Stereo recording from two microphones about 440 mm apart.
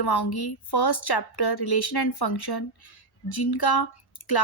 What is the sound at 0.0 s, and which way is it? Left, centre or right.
A woman's voice, left.